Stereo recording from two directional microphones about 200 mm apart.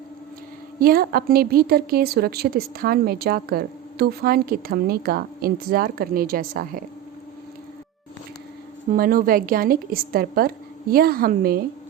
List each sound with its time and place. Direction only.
0.8 s a woman's voice: 50° right (ahead or behind)
8.9 s a woman's voice: 45° right (ahead or behind)